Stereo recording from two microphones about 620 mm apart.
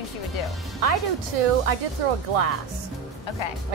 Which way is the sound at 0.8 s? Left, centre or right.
Right.